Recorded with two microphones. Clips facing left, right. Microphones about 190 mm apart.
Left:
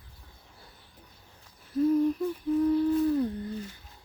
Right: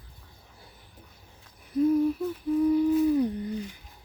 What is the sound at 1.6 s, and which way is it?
Humming, 15° right (ahead or behind).